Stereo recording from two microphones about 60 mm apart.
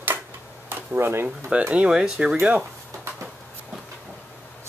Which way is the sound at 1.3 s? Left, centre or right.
Centre.